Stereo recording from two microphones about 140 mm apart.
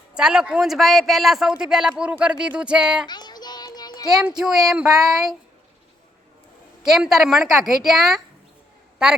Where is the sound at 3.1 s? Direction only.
30° left (ahead or behind).